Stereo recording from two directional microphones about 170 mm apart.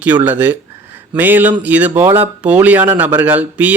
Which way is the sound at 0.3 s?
10° right (ahead or behind).